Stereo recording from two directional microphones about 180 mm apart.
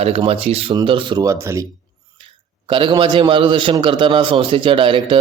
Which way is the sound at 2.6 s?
30° right (ahead or behind).